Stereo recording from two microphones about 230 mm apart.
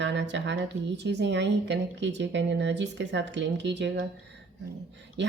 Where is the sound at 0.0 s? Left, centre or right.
Right.